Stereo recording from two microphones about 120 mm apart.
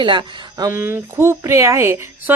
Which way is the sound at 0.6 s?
20° right (ahead or behind).